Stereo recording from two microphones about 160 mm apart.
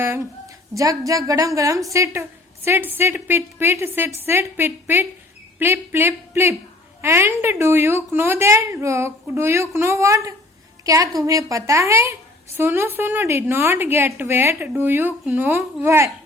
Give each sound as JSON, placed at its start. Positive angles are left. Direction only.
{"t": 0.0, "sound": "a woman's voice", "side_deg": -15}